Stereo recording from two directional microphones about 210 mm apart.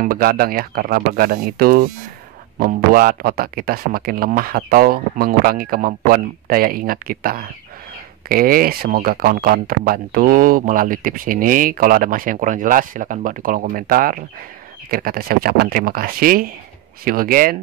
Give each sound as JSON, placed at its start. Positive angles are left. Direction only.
{"t": 0.0, "sound": "speech", "side_deg": -45}